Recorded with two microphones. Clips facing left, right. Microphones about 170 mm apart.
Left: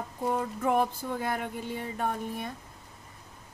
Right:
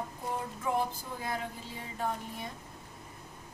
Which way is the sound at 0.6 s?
65° left (ahead or behind).